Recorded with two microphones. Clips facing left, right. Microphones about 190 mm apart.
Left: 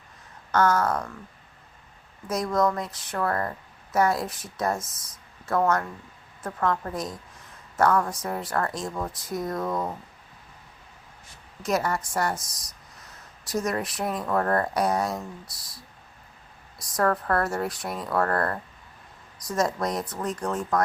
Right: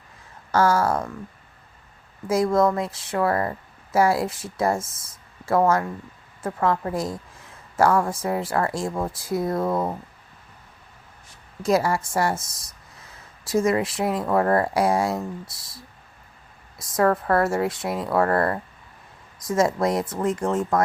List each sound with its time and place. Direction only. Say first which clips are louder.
0.6 s speech: right 3 dB; 30° right (ahead or behind)
2.2 s speech: right 5 dB; 25° right (ahead or behind)
3.2 s a woman's voice: right 4 dB; 10° right (ahead or behind)
3.9 s speech: right 4 dB; 30° right (ahead or behind)
5.6 s a woman's voice: right 2 dB; 5° right (ahead or behind)
6.4 s speech: right 4 dB; 25° right (ahead or behind)
11.6 s a woman's voice: right 5 dB; 30° right (ahead or behind)
14.3 s a woman's voice: right 4 dB; 10° right (ahead or behind)
14.7 s a woman's voice: right 4 dB; 25° right (ahead or behind)
18.2 s a woman's voice: right 4 dB; 15° right (ahead or behind)
19.4 s speech: right 5 dB; 25° right (ahead or behind)